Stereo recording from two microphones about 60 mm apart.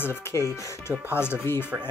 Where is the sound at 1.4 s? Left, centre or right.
Left.